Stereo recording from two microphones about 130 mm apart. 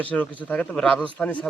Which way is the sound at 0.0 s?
10° left (ahead or behind).